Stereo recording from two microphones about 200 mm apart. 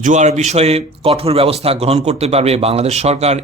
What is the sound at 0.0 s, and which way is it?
Speech, 40° right (ahead or behind).